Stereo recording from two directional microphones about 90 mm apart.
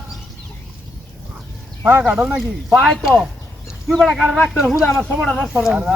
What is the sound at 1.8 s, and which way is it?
Speech, 15° right (ahead or behind).